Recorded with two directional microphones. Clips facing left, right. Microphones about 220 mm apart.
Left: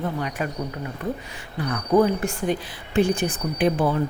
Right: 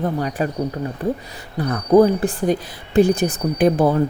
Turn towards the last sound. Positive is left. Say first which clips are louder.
# right 5 dB
turn(degrees=-40)  # may be behind; listen again after turning